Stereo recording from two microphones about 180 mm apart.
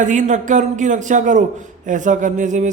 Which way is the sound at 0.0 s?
45° right (ahead or behind).